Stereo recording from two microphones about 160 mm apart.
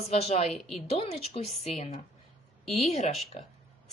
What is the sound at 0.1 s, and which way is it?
Speech, 40° left (ahead or behind).